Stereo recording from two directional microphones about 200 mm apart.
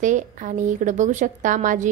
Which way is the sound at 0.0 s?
40° right (ahead or behind).